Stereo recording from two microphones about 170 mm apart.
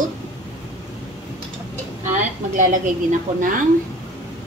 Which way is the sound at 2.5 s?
50° right (ahead or behind).